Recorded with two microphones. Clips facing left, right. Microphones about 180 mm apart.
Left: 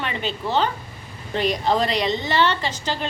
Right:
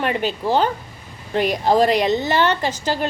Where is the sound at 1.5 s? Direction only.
50° right (ahead or behind).